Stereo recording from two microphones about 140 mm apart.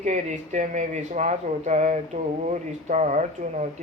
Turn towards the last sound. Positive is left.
turn(degrees=-60)  # may be behind; listen again after turning